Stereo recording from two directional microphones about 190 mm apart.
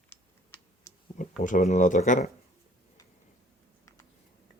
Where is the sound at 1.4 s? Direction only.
40° left (ahead or behind).